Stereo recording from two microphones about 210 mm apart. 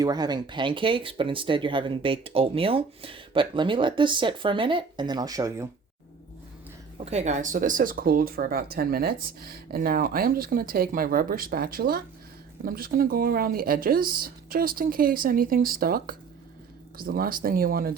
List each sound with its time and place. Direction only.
0.0 s speech: 20° right (ahead or behind)
7.0 s speech: 30° right (ahead or behind)